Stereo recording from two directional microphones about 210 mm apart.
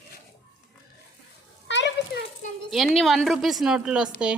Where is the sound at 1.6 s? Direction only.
60° left (ahead or behind).